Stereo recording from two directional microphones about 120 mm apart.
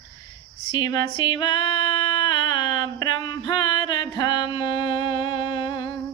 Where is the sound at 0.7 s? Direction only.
40° left (ahead or behind).